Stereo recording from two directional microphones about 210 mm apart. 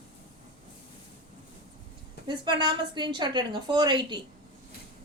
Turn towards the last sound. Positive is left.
turn(degrees=-20)  # may be behind; listen again after turning